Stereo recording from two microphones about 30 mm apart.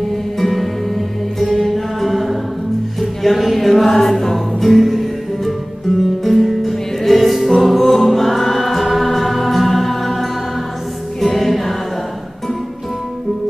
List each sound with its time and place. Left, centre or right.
0.4 s music: centre
1.5 s mantra: centre
3.0 s a sound: centre
3.8 s music: centre
7.6 s choir: centre
11.1 s music: centre